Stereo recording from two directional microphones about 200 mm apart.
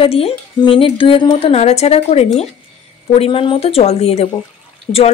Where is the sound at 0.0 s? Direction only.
30° left (ahead or behind).